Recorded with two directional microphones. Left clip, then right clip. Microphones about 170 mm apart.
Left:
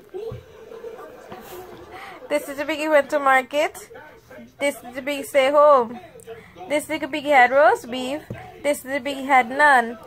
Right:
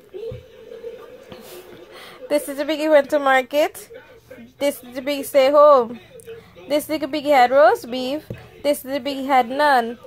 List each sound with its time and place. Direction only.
2.0 s a woman's voice: 35° right (ahead or behind)